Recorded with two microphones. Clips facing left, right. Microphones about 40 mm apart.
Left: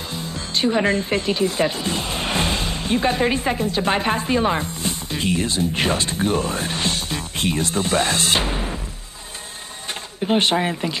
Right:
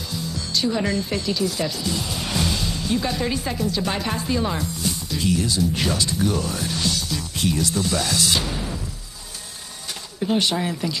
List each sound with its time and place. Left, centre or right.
0.1 s speech: left
10.2 s speech: left